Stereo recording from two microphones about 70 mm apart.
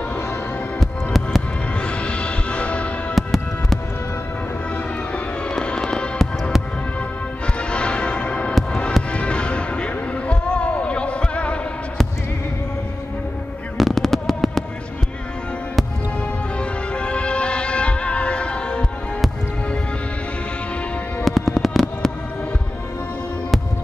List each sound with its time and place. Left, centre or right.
0.7 s music: centre
1.8 s music: centre
3.2 s music: centre
5.1 s fireworks: centre
7.4 s music: centre
13.7 s fireworks: centre
16.5 s music: centre
21.2 s music: centre